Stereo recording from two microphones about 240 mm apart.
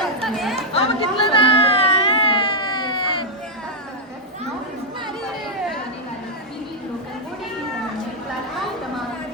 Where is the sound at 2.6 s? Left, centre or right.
Centre.